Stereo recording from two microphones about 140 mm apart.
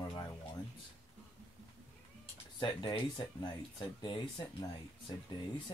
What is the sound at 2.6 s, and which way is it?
Speech, 30° left (ahead or behind).